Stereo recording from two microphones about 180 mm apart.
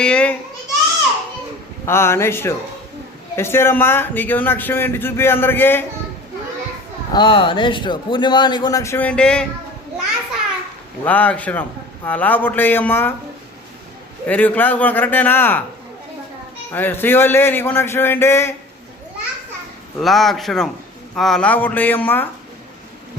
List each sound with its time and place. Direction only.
0.0 s a child's voice: 5° left (ahead or behind)
1.9 s a man's voice: 15° left (ahead or behind)
7.1 s speech: 25° left (ahead or behind); by 9.5 s 5° left (ahead or behind)
11.0 s a man's voice: 10° left (ahead or behind)
14.3 s a man's voice: 10° left (ahead or behind)
16.7 s a man's voice: 10° left (ahead or behind)
20.0 s a man's voice: centre (ahead or behind)